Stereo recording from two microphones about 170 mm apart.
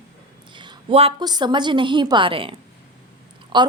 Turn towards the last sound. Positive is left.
turn(degrees=-30)  # may be behind; listen again after turning